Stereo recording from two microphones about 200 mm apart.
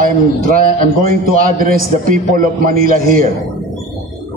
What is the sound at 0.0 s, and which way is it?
A man's voice, 45° right (ahead or behind).